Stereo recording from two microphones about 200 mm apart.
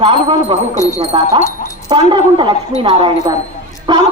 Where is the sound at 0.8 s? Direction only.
15° left (ahead or behind).